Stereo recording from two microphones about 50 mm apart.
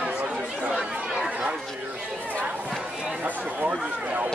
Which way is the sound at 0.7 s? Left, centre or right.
Centre.